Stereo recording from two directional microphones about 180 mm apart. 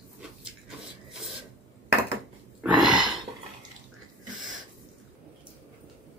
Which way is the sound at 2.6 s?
5° right (ahead or behind).